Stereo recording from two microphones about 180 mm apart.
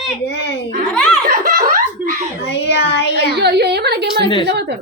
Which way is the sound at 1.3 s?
50° right (ahead or behind).